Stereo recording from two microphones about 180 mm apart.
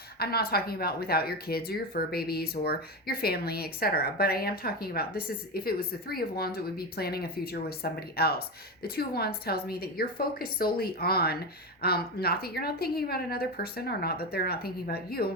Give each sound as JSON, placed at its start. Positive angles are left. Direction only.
{"t": 0.2, "sound": "speech", "side_deg": 60}